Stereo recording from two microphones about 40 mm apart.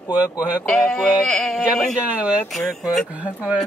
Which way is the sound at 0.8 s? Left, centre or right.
Centre.